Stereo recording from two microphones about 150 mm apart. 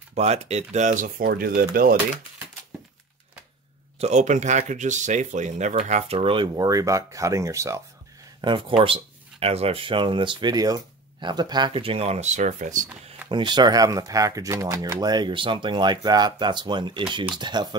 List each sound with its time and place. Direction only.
0.1 s speech: 45° right (ahead or behind); by 2.0 s 75° right (ahead or behind)
4.0 s speech: 50° right (ahead or behind); by 7.8 s 20° right (ahead or behind)
8.4 s speech: 35° right (ahead or behind); by 12.8 s 55° right (ahead or behind)
13.3 s speech: 30° right (ahead or behind)